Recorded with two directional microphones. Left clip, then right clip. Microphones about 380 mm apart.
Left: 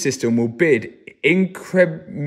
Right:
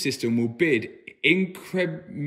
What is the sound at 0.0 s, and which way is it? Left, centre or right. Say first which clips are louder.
A man's voice: left 6 dB; left.